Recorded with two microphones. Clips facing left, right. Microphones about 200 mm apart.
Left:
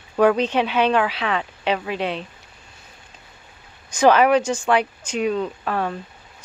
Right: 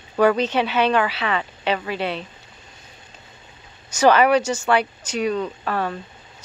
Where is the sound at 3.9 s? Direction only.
5° right (ahead or behind).